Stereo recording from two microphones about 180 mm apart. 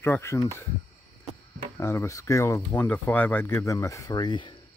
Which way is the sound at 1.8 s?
15° left (ahead or behind).